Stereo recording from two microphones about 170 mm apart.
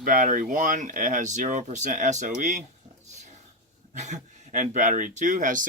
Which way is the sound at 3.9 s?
45° right (ahead or behind).